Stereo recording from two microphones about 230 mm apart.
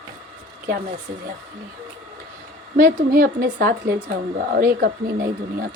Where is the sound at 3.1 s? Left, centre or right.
Right.